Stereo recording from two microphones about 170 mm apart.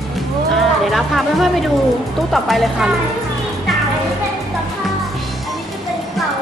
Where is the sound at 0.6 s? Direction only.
Centre (ahead or behind).